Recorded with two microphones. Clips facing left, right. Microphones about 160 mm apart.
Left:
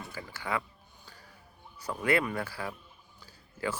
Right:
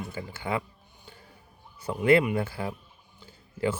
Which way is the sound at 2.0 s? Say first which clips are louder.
Right 7 dB; 20° right (ahead or behind).